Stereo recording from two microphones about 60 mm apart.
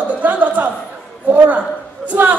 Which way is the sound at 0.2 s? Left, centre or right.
Right.